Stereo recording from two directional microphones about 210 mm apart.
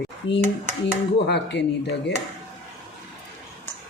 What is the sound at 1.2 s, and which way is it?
Speech, 55° left (ahead or behind).